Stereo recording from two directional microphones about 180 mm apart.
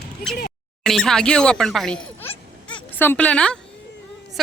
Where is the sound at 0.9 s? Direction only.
Centre (ahead or behind).